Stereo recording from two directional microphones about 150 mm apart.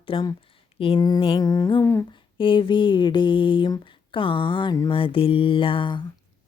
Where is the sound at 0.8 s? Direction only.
35° left (ahead or behind).